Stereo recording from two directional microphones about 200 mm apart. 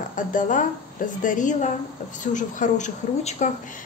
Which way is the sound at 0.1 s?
40° left (ahead or behind).